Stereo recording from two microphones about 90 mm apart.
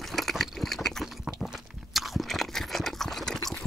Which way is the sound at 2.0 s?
Centre (ahead or behind).